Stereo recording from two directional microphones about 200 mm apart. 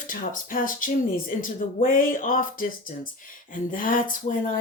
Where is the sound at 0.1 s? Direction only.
40° left (ahead or behind).